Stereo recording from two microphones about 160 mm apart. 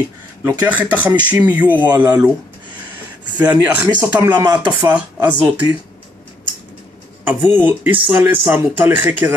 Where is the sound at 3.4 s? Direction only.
10° right (ahead or behind).